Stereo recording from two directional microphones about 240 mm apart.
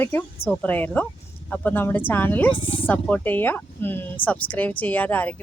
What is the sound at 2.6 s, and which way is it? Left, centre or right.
Speech, left.